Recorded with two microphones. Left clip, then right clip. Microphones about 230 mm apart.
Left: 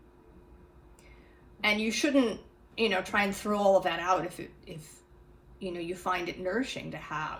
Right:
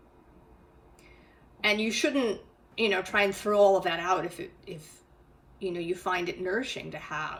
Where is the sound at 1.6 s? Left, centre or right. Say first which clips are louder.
Right 1 dB; centre.